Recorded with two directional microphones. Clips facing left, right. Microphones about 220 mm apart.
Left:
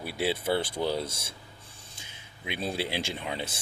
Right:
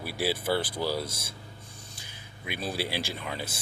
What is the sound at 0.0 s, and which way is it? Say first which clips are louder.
Speech: left 1 dB; 20° left (ahead or behind).